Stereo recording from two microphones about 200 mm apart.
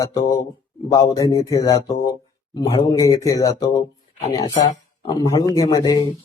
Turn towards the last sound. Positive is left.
turn(degrees=20)  # may be behind; listen again after turning